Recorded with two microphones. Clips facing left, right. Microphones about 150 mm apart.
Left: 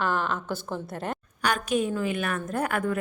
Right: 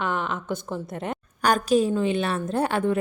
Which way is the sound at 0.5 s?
15° right (ahead or behind).